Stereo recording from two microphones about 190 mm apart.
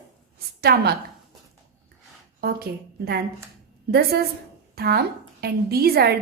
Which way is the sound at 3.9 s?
55° right (ahead or behind).